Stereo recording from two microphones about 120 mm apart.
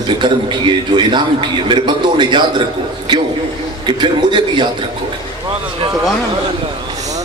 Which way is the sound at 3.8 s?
40° right (ahead or behind).